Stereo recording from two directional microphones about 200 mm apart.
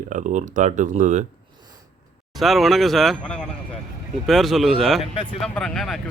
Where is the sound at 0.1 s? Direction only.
40° right (ahead or behind).